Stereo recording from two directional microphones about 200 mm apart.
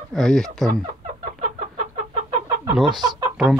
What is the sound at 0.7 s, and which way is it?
Chicken, 40° right (ahead or behind).